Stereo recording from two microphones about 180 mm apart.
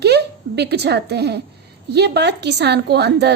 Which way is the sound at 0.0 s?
65° right (ahead or behind).